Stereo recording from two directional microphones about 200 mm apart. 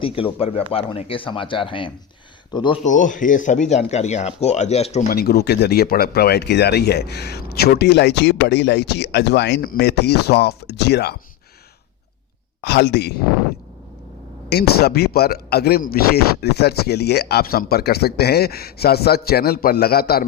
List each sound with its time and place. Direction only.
0.0 s speech: 30° left (ahead or behind)
2.8 s speech: 40° left (ahead or behind)
5.0 s speech: 50° left (ahead or behind)
12.6 s speech: 55° left (ahead or behind)
14.5 s speech: 50° left (ahead or behind)